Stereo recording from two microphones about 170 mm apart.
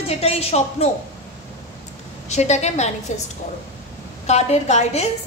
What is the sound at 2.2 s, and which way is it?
A woman's voice, 40° left (ahead or behind).